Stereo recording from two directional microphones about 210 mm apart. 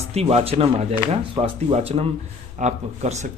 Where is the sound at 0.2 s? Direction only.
30° right (ahead or behind).